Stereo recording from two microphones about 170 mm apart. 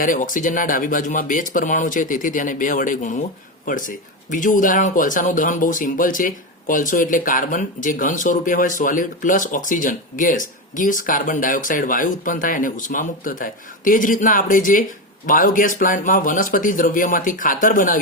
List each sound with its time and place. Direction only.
0.0 s speech: 50° left (ahead or behind)